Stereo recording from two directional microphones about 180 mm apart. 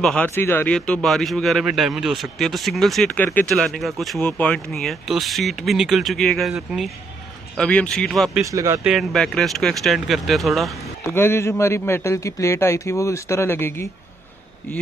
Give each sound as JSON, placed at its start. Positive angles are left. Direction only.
{"t": 0.0, "sound": "speech", "side_deg": 5}
{"t": 8.5, "sound": "speech", "side_deg": -20}
{"t": 8.8, "sound": "speech", "side_deg": 0}
{"t": 11.1, "sound": "a man's voice", "side_deg": 15}